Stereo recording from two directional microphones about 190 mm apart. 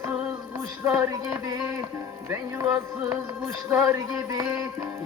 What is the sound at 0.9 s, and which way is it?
Speech, 5° right (ahead or behind).